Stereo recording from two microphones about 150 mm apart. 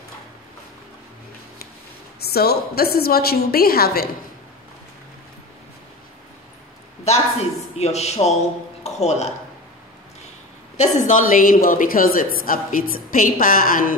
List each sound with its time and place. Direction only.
2.2 s a woman's voice: 90° left
7.1 s a man's voice: 45° left (ahead or behind)
10.8 s a woman's voice: 55° left (ahead or behind)